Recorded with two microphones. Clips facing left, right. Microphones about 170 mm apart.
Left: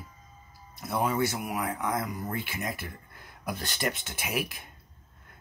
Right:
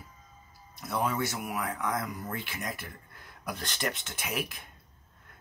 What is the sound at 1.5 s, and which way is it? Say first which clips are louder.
Speech: left 2 dB; 20° left (ahead or behind).